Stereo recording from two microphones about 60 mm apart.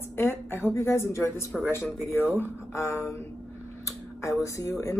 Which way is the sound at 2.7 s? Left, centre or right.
Left.